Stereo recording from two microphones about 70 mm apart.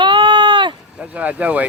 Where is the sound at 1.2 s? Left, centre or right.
Centre.